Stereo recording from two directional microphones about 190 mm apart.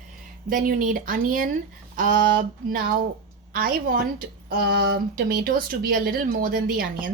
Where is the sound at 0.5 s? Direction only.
45° right (ahead or behind).